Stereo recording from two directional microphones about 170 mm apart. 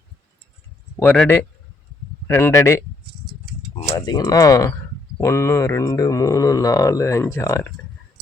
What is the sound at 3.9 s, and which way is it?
Speech, 20° left (ahead or behind).